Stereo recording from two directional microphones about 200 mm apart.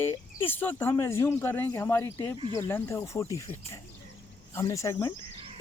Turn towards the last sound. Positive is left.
turn(degrees=15)  # may be behind; listen again after turning